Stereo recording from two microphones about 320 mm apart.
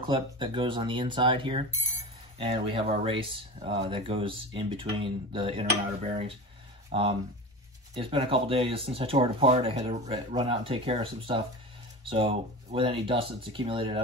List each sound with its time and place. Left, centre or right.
0.0 s speech: centre